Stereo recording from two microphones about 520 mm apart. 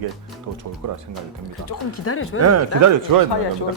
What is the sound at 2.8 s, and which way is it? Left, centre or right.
Speech, right.